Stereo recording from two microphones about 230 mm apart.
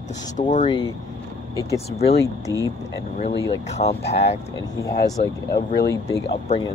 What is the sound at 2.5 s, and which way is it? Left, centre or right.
Speech, centre.